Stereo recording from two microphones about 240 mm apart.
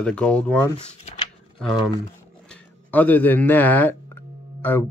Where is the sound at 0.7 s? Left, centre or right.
Left.